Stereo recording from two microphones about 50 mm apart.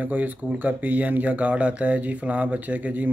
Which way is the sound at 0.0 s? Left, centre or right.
Right.